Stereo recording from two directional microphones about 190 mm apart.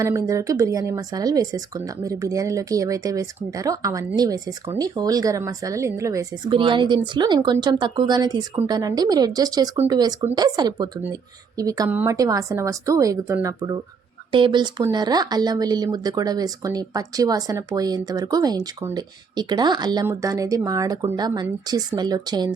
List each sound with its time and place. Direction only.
0.0 s speech: 15° right (ahead or behind)